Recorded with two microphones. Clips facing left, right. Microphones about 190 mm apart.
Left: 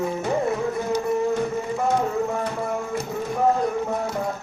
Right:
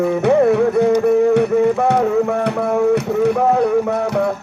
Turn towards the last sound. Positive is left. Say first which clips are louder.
# right 9 dB
turn(degrees=-70)  # may be behind; listen again after turning